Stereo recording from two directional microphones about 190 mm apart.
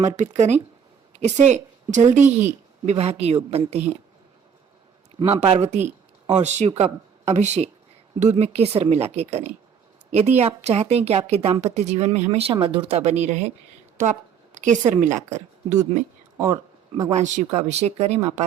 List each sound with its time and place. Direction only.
0.2 s a woman's voice: 35° right (ahead or behind)
5.2 s a woman's voice: 30° right (ahead or behind)
14.5 s a woman's voice: 40° right (ahead or behind)
17.1 s a woman's voice: 40° right (ahead or behind)